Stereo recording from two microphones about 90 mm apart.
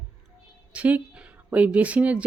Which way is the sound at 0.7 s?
15° right (ahead or behind).